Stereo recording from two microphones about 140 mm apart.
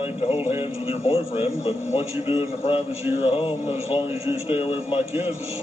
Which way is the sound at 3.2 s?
40° left (ahead or behind).